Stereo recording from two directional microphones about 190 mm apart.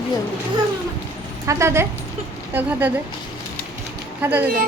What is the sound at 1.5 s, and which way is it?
Speech, 15° right (ahead or behind).